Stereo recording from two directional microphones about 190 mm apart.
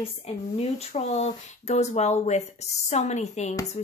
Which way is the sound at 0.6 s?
35° left (ahead or behind).